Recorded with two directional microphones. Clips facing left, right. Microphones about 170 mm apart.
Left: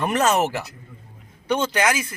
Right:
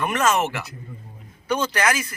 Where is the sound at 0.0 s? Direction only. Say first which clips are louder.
Left 1 dB; 30° left (ahead or behind).